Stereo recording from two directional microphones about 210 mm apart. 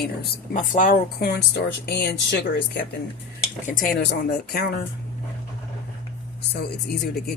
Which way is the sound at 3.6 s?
40° left (ahead or behind).